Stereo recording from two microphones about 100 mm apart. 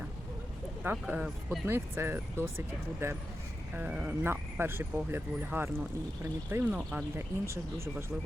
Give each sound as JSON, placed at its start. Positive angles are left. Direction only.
{"t": 0.9, "sound": "speech", "side_deg": -15}
{"t": 3.8, "sound": "speech", "side_deg": -15}